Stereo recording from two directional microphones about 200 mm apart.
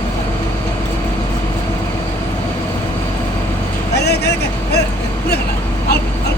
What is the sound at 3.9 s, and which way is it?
Vehicle, 55° left (ahead or behind).